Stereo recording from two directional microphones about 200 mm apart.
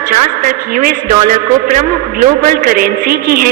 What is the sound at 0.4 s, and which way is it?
A woman's voice, 45° right (ahead or behind).